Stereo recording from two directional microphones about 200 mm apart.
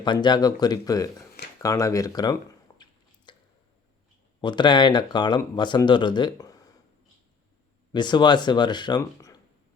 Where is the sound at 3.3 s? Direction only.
20° left (ahead or behind).